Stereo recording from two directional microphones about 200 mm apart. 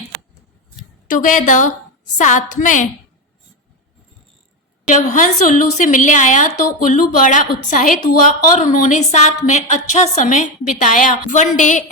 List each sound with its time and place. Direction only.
1.0 s a woman's voice: 40° left (ahead or behind)
4.9 s a woman's voice: 40° left (ahead or behind)